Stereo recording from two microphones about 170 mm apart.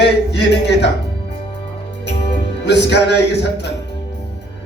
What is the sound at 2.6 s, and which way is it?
Speech, 90° left.